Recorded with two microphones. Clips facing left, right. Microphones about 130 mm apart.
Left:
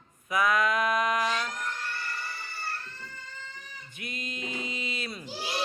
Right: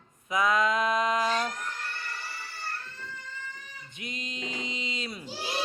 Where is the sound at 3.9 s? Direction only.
20° right (ahead or behind).